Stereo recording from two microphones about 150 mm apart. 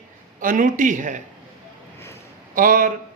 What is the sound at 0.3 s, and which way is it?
Speech, 60° right (ahead or behind).